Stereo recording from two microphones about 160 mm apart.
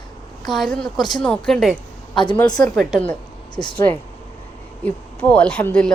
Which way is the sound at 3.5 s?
30° left (ahead or behind).